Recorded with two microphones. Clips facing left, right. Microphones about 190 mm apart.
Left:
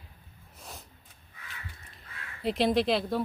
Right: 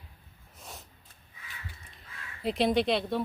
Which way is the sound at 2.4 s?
Centre (ahead or behind).